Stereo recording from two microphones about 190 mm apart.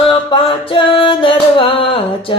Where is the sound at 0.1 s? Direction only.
25° left (ahead or behind).